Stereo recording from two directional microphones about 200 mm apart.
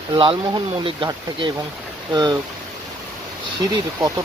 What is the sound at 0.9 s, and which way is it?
Speech, 25° right (ahead or behind).